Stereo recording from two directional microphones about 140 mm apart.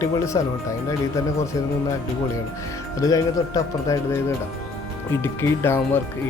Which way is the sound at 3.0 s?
25° left (ahead or behind).